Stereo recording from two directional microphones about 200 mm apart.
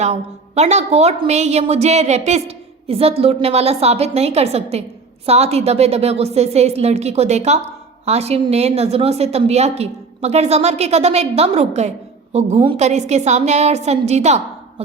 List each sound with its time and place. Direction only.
0.0 s a woman's voice: 35° right (ahead or behind)